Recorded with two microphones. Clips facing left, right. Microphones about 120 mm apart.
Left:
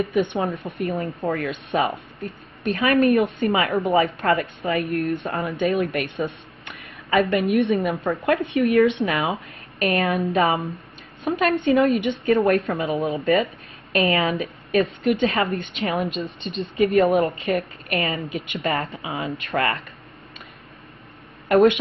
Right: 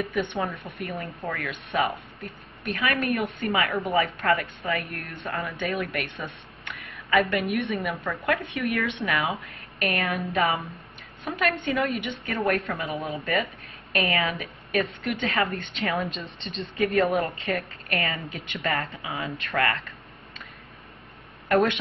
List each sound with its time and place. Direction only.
0.0 s speech: 20° left (ahead or behind)
21.5 s a woman's voice: 20° left (ahead or behind)